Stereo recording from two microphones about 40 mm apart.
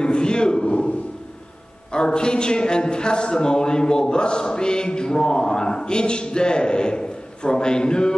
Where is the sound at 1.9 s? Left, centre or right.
Left.